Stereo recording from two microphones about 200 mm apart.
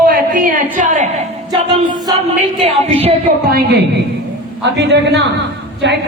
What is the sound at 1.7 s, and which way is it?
Music, 25° right (ahead or behind).